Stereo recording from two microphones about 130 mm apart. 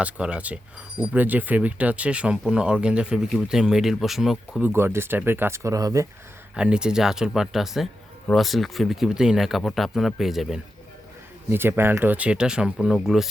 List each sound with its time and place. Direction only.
0.0 s speech: 10° right (ahead or behind)
4.6 s speech: 20° right (ahead or behind)
6.5 s speech: 5° right (ahead or behind)
11.4 s speech: 15° right (ahead or behind)